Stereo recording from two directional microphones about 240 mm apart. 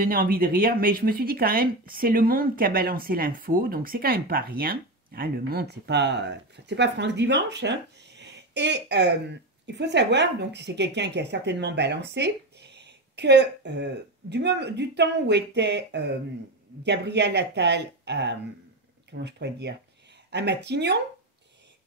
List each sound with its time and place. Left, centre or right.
0.0 s a woman's voice: right